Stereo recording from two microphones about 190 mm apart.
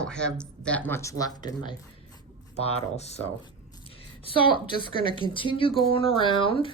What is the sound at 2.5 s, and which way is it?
Speech, 35° left (ahead or behind).